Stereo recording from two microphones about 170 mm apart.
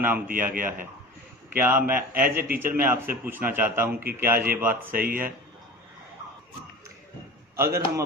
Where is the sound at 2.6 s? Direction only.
10° right (ahead or behind).